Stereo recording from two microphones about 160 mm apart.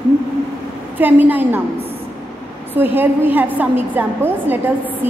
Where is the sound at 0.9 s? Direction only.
10° right (ahead or behind).